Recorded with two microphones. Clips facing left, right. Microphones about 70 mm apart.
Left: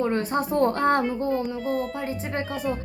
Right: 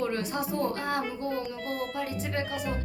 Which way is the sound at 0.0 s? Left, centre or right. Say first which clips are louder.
Left 6 dB; left.